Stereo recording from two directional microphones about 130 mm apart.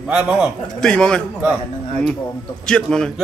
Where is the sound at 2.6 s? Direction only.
5° left (ahead or behind).